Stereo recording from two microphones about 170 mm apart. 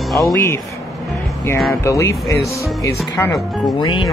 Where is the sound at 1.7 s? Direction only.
15° left (ahead or behind).